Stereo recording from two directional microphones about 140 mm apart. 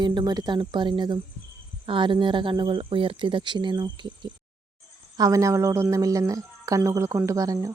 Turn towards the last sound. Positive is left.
turn(degrees=-25)  # may be behind; listen again after turning